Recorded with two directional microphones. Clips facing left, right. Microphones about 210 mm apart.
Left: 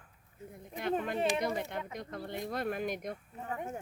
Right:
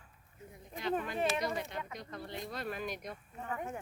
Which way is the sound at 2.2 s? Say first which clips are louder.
Left 5 dB; 55° left (ahead or behind).